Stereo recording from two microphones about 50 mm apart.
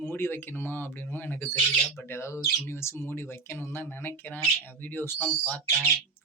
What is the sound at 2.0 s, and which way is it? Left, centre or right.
Speech, left.